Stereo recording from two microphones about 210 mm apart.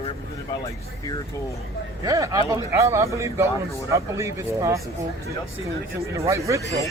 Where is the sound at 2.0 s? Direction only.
15° right (ahead or behind).